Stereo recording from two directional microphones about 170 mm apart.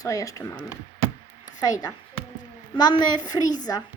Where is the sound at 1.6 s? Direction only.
20° left (ahead or behind).